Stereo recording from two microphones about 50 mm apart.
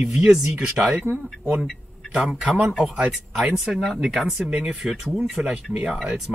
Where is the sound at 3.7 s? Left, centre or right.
Centre.